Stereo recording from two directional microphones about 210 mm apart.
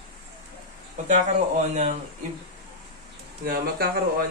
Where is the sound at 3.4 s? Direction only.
45° right (ahead or behind).